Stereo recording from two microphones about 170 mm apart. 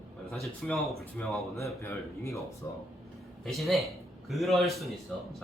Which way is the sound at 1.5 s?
15° left (ahead or behind).